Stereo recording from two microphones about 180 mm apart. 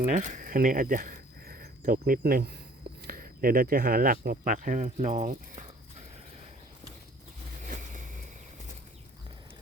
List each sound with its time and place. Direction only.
0.1 s speech: 45° right (ahead or behind)
7.6 s vehicle: 45° right (ahead or behind)